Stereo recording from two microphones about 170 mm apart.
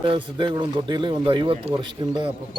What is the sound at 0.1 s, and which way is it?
Speech, 30° right (ahead or behind).